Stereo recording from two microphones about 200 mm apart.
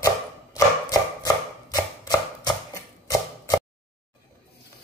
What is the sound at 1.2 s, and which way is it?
Chopping, 20° left (ahead or behind).